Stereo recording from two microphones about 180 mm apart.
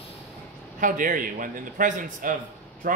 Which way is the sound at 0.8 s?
50° right (ahead or behind).